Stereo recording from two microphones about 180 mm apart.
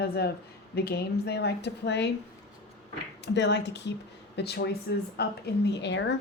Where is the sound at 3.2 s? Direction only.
75° left (ahead or behind).